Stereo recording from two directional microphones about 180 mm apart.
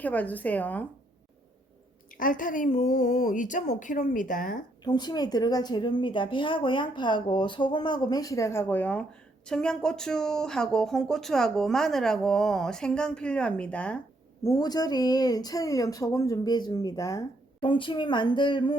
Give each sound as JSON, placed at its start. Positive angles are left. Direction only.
{"t": 0.0, "sound": "speech", "side_deg": 10}
{"t": 2.1, "sound": "speech", "side_deg": 50}
{"t": 4.8, "sound": "a woman's voice", "side_deg": 25}
{"t": 14.4, "sound": "a woman's voice", "side_deg": 20}
{"t": 17.6, "sound": "a woman's voice", "side_deg": 25}